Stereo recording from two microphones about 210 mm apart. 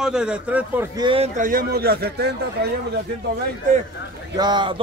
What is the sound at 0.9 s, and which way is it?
Speech, 25° right (ahead or behind).